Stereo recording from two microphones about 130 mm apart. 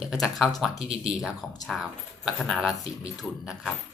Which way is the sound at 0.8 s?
50° right (ahead or behind).